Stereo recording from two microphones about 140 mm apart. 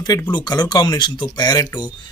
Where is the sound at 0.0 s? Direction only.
30° left (ahead or behind).